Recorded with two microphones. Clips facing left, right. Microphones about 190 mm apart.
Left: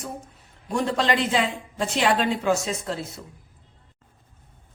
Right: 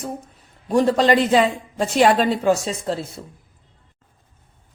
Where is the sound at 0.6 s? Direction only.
40° right (ahead or behind).